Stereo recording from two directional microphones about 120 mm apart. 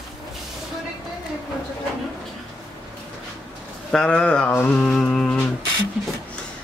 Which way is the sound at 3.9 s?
10° left (ahead or behind).